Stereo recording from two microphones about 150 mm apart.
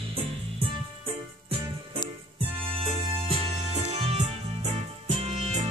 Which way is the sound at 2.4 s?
40° right (ahead or behind).